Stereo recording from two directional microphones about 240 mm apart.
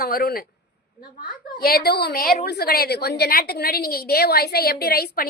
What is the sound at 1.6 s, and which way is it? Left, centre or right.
A woman's voice, left.